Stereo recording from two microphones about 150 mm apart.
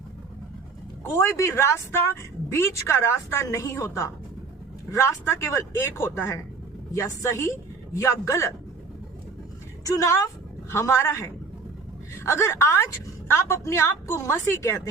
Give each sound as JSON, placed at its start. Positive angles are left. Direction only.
{"t": 1.0, "sound": "a woman's voice", "side_deg": 20}
{"t": 9.8, "sound": "a woman's voice", "side_deg": 20}